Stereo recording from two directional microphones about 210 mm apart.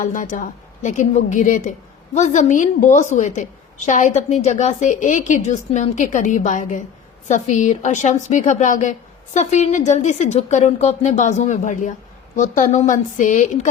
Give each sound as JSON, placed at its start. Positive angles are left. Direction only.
{"t": 0.0, "sound": "a woman's voice", "side_deg": 35}